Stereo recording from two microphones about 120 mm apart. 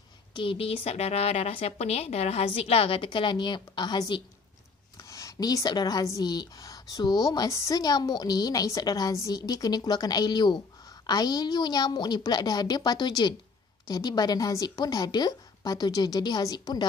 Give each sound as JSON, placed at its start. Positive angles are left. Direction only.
{"t": 0.3, "sound": "speech", "side_deg": 45}